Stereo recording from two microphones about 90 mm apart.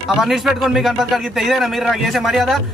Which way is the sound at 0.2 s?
5° right (ahead or behind).